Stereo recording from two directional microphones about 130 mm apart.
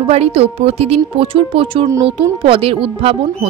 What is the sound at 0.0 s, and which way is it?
A woman's voice, 50° right (ahead or behind).